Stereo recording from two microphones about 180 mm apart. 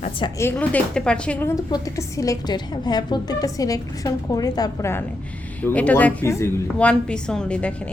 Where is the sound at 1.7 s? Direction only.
20° left (ahead or behind).